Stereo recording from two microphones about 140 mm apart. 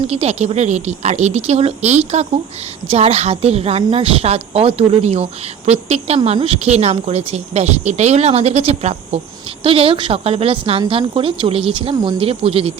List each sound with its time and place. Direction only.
0.1 s a woman's voice: 50° right (ahead or behind)